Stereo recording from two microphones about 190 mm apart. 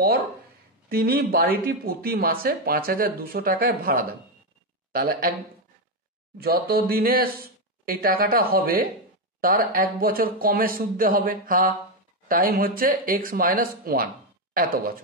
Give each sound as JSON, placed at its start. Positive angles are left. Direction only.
{"t": 0.8, "sound": "speech", "side_deg": -50}
{"t": 6.4, "sound": "speech", "side_deg": -55}